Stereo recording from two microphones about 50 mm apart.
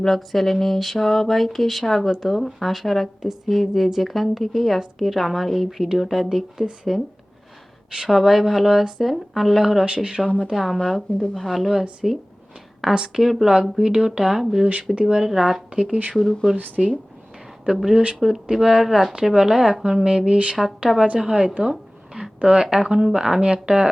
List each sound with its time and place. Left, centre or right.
0.0 s speech: centre
9.8 s a sound: right
10.4 s speech: centre
12.9 s speech: centre
16.1 s speech: centre
16.6 s speech: right
17.7 s speech: centre
20.1 s a sound: centre
20.9 s speech: centre
21.7 s a sound: centre
22.4 s speech: centre